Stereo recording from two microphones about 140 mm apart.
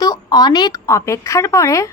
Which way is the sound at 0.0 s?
30° left (ahead or behind).